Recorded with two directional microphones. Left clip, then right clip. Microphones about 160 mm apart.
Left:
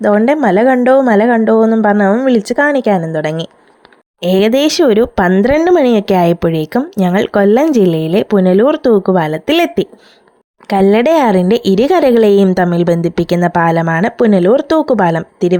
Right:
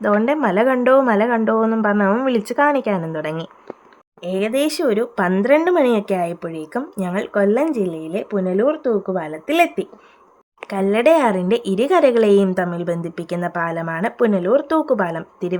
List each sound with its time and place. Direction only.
0.3 s speech: 35° left (ahead or behind)
4.2 s a woman's voice: 60° left (ahead or behind)
5.3 s a woman's voice: 40° left (ahead or behind)